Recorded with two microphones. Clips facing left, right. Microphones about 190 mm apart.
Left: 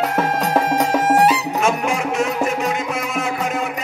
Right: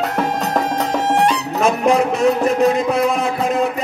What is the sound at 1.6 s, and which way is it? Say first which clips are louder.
Music: right 10 dB; 35° right (ahead or behind).